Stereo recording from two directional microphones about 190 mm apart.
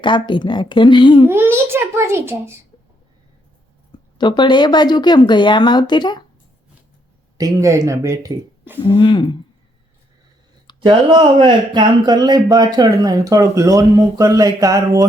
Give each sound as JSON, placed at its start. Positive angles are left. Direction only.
{"t": 0.0, "sound": "speech", "side_deg": 25}
{"t": 1.3, "sound": "speech", "side_deg": -15}
{"t": 4.2, "sound": "speech", "side_deg": 25}
{"t": 7.3, "sound": "speech", "side_deg": -15}
{"t": 8.9, "sound": "speech", "side_deg": 25}
{"t": 10.8, "sound": "speech", "side_deg": -25}